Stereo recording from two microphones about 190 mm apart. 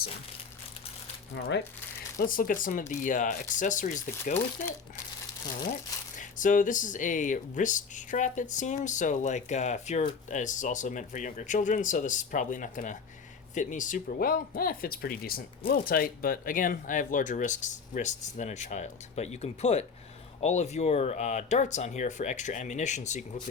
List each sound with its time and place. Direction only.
1.4 s speech: 65° left (ahead or behind)
2.1 s speech: 45° left (ahead or behind)
6.1 s speech: 45° left (ahead or behind)